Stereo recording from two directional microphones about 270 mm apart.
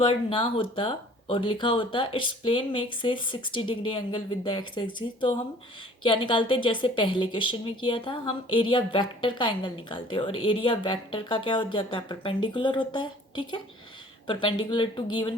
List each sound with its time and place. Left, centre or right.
0.0 s speech: centre
6.0 s a woman's voice: centre